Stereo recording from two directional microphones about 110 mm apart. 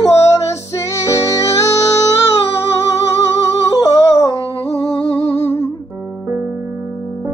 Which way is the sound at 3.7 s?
30° left (ahead or behind).